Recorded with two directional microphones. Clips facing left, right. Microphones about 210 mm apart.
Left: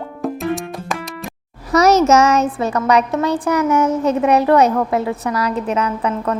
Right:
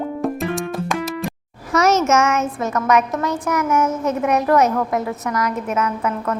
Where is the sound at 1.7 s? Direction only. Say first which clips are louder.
Left 4 dB; 35° left (ahead or behind).